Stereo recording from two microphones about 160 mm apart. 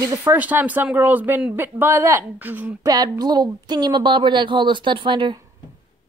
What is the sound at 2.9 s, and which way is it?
A woman's voice, 25° right (ahead or behind).